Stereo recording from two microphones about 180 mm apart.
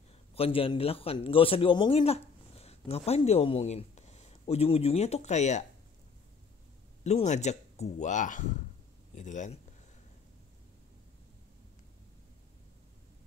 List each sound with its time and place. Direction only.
0.3 s a man's voice: 30° left (ahead or behind)
7.0 s speech: 40° left (ahead or behind)